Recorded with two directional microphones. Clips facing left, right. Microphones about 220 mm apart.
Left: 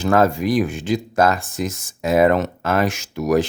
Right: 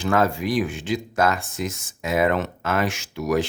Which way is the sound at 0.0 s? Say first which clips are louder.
Left 4 dB; 40° left (ahead or behind).